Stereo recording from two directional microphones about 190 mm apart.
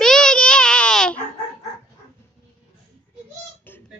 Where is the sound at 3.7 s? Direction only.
10° left (ahead or behind).